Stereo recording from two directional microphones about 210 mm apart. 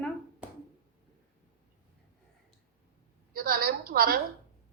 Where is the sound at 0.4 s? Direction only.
5° right (ahead or behind).